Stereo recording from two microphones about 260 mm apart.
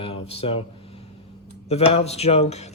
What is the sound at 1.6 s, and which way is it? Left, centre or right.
Speech, left.